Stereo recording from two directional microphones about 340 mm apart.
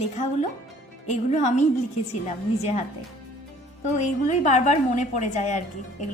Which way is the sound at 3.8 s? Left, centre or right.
Left.